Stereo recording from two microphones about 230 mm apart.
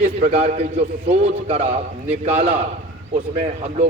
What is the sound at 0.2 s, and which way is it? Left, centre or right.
A man's voice, right.